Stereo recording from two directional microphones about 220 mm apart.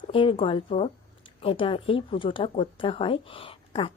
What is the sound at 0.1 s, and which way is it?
Speech, 25° left (ahead or behind).